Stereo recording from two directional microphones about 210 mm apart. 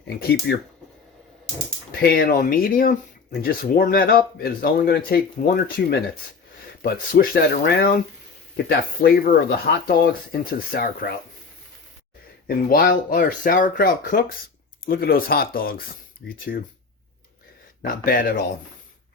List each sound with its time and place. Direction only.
1.9 s speech: 50° left (ahead or behind)
12.5 s speech: 40° left (ahead or behind)
17.8 s speech: 40° left (ahead or behind)